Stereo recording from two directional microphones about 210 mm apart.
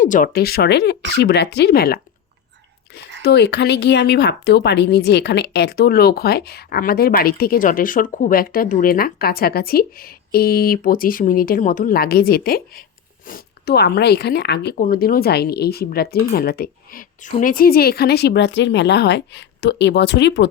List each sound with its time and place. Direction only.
0.0 s speech: 40° left (ahead or behind)
3.2 s speech: 50° left (ahead or behind)